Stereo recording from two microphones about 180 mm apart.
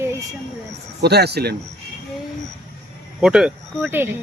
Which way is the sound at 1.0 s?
65° right (ahead or behind).